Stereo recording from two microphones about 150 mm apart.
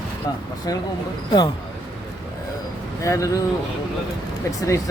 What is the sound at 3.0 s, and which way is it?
Speech, 20° left (ahead or behind).